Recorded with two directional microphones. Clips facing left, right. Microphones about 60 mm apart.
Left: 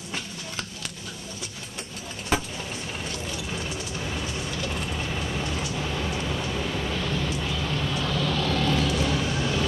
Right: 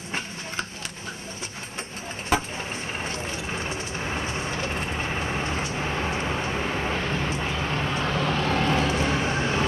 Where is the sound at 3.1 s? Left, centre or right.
Right.